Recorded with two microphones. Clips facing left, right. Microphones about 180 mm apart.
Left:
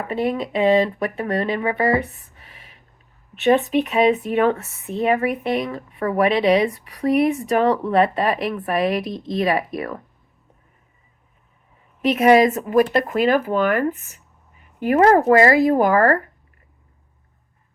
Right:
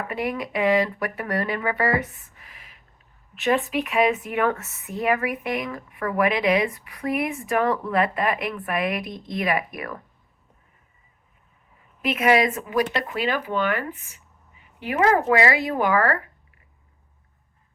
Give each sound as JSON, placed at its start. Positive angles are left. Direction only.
{"t": 0.1, "sound": "speech", "side_deg": 25}
{"t": 12.1, "sound": "speech", "side_deg": 40}